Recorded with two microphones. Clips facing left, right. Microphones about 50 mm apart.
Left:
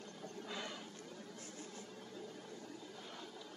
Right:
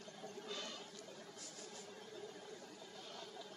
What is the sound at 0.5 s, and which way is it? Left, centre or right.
Chatter, centre.